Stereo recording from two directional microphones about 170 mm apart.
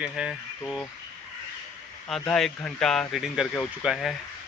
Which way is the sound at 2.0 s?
5° left (ahead or behind).